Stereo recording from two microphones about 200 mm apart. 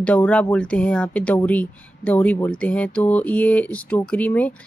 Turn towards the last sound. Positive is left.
turn(degrees=10)  # may be behind; listen again after turning